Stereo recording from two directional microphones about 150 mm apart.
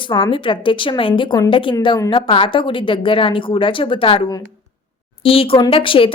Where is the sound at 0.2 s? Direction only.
35° left (ahead or behind).